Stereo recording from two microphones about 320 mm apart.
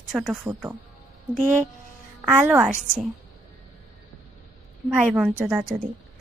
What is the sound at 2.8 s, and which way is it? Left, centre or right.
Speech, right.